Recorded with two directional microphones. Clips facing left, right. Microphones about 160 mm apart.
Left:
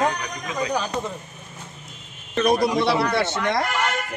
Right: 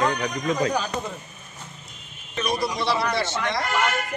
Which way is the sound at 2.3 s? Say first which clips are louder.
Left 7 dB; 55° left (ahead or behind).